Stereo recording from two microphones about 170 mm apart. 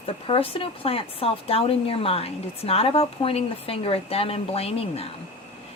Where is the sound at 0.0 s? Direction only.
35° left (ahead or behind).